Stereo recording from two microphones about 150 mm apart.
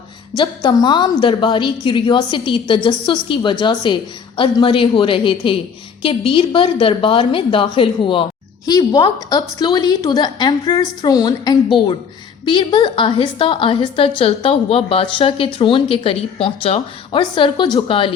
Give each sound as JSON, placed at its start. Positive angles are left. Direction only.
{"t": 0.3, "sound": "a woman's voice", "side_deg": 30}